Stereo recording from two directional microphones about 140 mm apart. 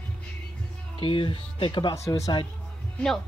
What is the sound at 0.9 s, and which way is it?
Speech, 40° left (ahead or behind).